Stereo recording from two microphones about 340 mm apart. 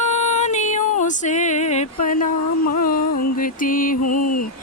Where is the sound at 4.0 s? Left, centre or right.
Left.